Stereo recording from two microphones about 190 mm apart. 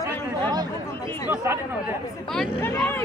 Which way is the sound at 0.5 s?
20° right (ahead or behind).